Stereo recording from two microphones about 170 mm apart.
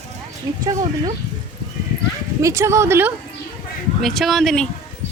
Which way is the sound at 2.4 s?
15° right (ahead or behind).